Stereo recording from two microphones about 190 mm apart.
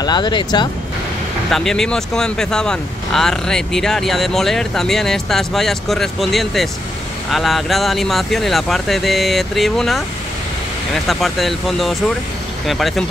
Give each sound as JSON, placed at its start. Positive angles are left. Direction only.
{"t": 0.0, "sound": "speech", "side_deg": 20}
{"t": 1.5, "sound": "speech", "side_deg": 0}
{"t": 11.1, "sound": "speech", "side_deg": 0}